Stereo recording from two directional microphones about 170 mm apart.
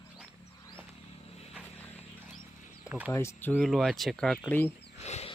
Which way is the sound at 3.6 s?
Centre (ahead or behind).